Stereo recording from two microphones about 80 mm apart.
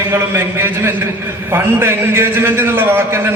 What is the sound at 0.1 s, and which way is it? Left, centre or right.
A man's voice, right.